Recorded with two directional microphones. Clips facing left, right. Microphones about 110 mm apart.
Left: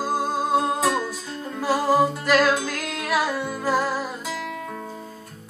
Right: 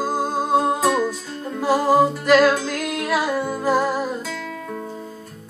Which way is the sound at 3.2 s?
15° right (ahead or behind).